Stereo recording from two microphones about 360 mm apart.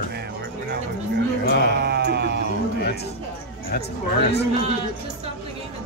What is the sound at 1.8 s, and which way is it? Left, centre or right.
Sheep, right.